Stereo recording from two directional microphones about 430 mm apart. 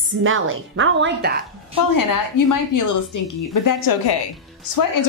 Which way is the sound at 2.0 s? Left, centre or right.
Left.